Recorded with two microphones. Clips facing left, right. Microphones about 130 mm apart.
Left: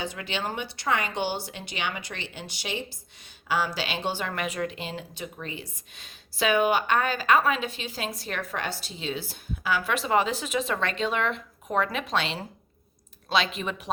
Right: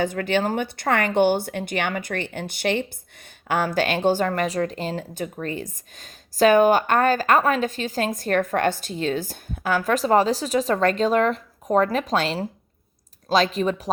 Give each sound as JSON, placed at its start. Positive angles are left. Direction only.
{"t": 0.0, "sound": "speech", "side_deg": -50}